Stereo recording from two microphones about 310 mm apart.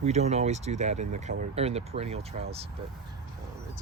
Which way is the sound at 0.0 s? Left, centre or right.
Right.